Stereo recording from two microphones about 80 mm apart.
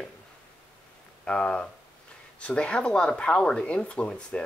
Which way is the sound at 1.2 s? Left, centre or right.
Centre.